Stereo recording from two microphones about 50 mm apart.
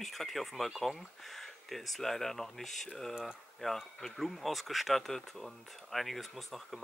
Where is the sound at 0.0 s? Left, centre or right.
Centre.